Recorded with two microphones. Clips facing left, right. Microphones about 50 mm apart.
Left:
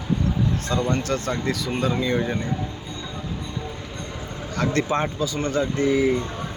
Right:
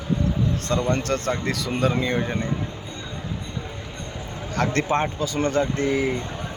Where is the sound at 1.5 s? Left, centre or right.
Right.